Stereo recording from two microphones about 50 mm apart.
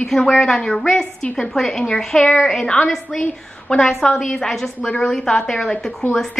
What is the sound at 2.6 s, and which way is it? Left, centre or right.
A woman's voice, centre.